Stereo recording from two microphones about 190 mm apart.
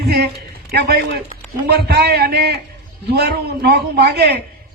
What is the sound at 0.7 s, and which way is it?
A man's voice, 60° right (ahead or behind).